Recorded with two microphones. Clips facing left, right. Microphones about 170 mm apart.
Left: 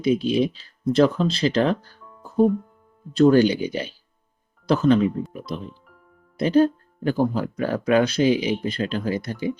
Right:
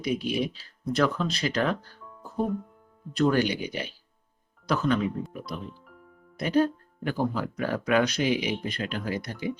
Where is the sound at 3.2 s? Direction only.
30° left (ahead or behind).